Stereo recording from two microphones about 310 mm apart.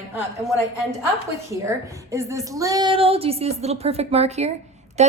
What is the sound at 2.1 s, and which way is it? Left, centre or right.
A woman's voice, centre.